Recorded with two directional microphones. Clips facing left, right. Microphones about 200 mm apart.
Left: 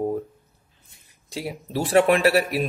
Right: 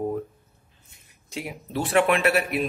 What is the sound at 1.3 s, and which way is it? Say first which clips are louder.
Speech: left 3 dB; 35° left (ahead or behind).